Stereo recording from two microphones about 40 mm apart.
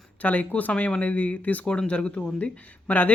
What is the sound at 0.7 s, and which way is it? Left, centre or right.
Speech, left.